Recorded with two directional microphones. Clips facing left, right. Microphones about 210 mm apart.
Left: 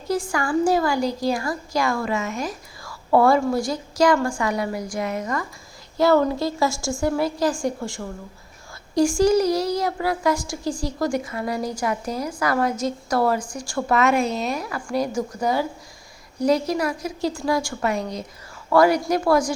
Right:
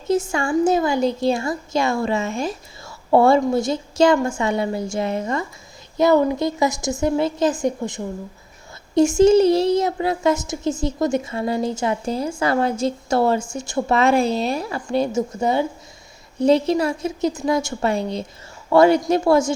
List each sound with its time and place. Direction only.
0.1 s a child's voice: 25° right (ahead or behind)